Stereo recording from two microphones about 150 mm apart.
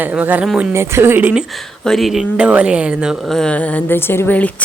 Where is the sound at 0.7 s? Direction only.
20° right (ahead or behind).